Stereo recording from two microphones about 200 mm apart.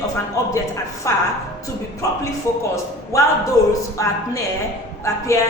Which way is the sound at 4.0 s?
15° left (ahead or behind).